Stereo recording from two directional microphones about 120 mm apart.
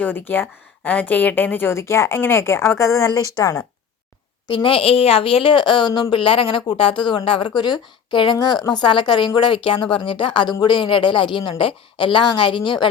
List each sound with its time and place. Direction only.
0.0 s a woman's voice: 15° left (ahead or behind)
4.4 s a woman's voice: 45° left (ahead or behind)